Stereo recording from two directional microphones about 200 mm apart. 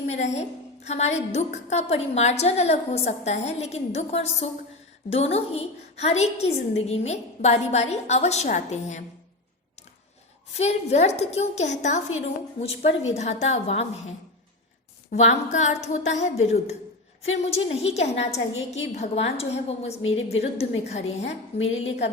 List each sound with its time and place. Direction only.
0.1 s a woman's voice: 35° left (ahead or behind)
10.6 s a woman's voice: 30° left (ahead or behind)
15.1 s a woman's voice: 35° left (ahead or behind)